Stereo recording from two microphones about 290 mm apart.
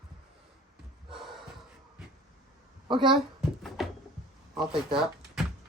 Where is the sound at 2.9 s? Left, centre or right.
Centre.